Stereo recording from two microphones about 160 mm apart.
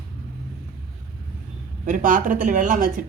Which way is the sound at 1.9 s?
55° right (ahead or behind).